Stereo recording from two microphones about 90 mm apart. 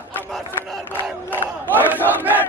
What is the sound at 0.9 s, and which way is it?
Battle cry, 25° left (ahead or behind).